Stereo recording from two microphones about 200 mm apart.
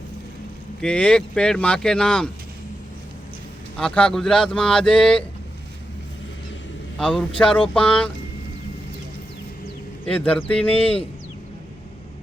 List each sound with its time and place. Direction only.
0.8 s speech: 5° left (ahead or behind)
3.8 s speech: 5° left (ahead or behind)
7.0 s speech: 5° left (ahead or behind)
10.1 s speech: 5° left (ahead or behind)
10.8 s speech: 30° left (ahead or behind)